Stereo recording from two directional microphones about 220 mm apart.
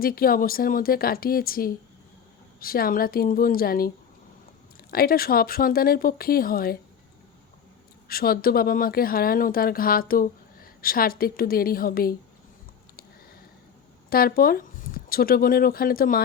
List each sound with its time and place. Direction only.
0.0 s speech: 40° left (ahead or behind)
8.0 s speech: 40° left (ahead or behind)
14.1 s speech: 40° left (ahead or behind)